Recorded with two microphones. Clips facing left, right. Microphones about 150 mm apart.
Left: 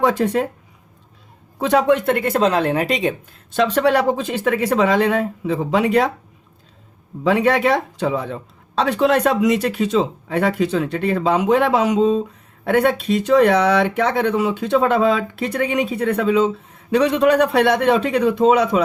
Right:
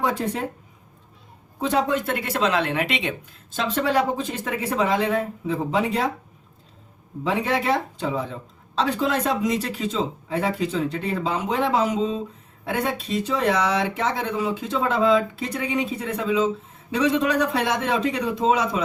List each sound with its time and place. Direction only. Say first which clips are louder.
0.0 s speech: left 7 dB; 75° left (ahead or behind)
1.5 s speech: left 6 dB; 80° left; by 3.2 s 40° left (ahead or behind)
3.5 s speech: left 6 dB; 75° left (ahead or behind)
7.3 s speech: left 7 dB; 75° left (ahead or behind)